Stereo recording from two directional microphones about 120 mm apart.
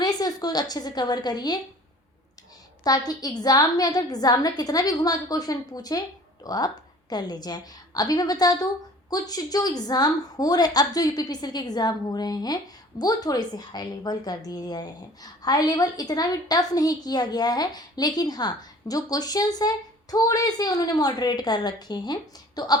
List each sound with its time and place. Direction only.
0.0 s a woman's voice: 35° left (ahead or behind)
2.8 s a woman's voice: 35° left (ahead or behind)